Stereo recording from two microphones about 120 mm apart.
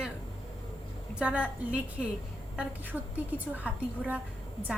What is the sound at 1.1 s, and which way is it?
A woman's voice, 10° right (ahead or behind).